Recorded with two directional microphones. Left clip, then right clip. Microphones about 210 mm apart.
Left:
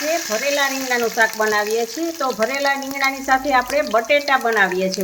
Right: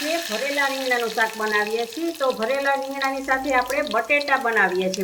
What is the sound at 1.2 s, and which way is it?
Speech, 55° left (ahead or behind).